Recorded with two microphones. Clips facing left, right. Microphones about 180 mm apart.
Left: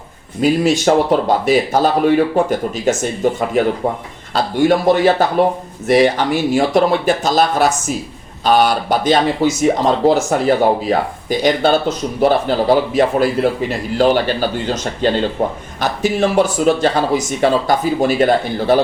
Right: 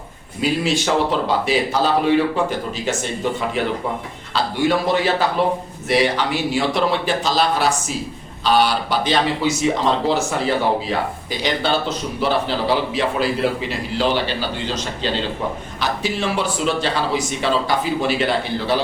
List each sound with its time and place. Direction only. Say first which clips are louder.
0.4 s speech: left 6 dB; 45° left (ahead or behind)